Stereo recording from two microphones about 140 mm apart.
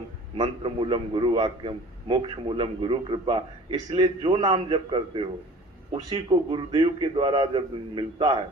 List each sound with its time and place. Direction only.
0.3 s a man's voice: 35° right (ahead or behind)